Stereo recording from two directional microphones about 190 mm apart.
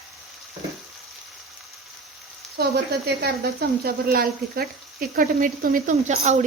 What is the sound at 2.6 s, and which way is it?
Speech, 55° right (ahead or behind).